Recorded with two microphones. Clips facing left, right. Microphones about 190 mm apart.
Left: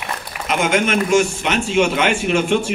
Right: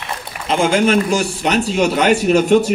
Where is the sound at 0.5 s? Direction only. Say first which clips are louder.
Right 4 dB; 30° right (ahead or behind).